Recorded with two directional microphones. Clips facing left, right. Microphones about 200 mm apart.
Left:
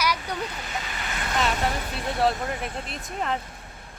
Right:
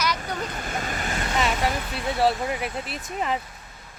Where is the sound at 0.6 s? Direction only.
50° right (ahead or behind).